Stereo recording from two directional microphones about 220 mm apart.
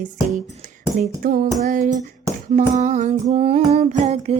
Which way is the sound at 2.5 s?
35° right (ahead or behind).